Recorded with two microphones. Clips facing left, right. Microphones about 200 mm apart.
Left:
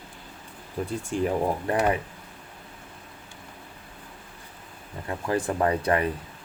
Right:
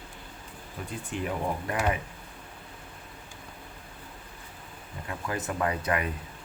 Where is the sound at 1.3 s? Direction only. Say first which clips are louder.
Left 4 dB; 35° left (ahead or behind).